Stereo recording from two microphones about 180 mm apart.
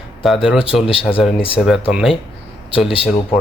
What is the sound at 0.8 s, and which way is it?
Speech, 30° left (ahead or behind).